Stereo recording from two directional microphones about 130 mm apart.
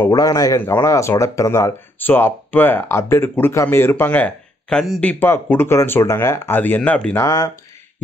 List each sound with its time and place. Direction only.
0.1 s speech: 25° left (ahead or behind); by 5.0 s 5° left (ahead or behind)
5.0 s speech: 15° left (ahead or behind)
7.2 s speech: 25° left (ahead or behind)